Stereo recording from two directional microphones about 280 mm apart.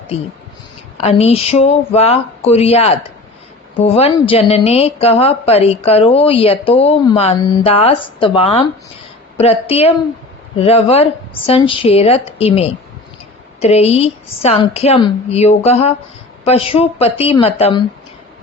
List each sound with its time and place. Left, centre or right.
0.1 s a woman's voice: left